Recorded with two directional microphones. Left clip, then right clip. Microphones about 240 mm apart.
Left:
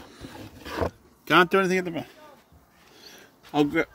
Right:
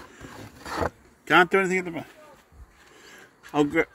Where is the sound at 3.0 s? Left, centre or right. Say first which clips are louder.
Right 1 dB; centre.